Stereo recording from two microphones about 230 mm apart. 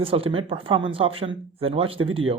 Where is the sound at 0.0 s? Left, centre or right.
Right.